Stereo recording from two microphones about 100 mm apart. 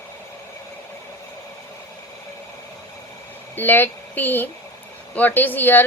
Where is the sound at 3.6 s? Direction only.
20° left (ahead or behind).